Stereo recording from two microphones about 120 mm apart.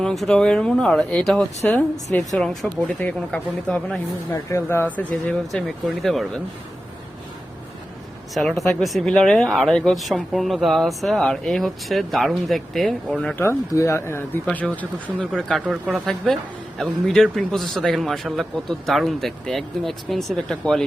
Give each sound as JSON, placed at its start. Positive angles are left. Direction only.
{"t": 0.0, "sound": "speech", "side_deg": 5}
{"t": 4.4, "sound": "speech", "side_deg": 20}
{"t": 4.9, "sound": "speech", "side_deg": 5}
{"t": 8.3, "sound": "speech", "side_deg": 0}
{"t": 13.3, "sound": "speech", "side_deg": 20}
{"t": 15.2, "sound": "speech", "side_deg": 0}